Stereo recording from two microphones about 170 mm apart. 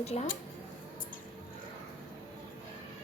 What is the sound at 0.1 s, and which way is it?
Speech, 40° left (ahead or behind).